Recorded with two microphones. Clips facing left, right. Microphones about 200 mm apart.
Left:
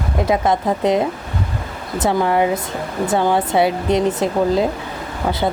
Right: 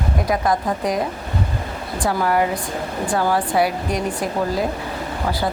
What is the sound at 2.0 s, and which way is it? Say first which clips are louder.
Speech: left 3 dB; 20° left (ahead or behind).